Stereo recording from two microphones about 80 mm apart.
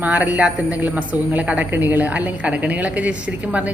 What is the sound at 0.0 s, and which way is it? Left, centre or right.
A woman's voice, right.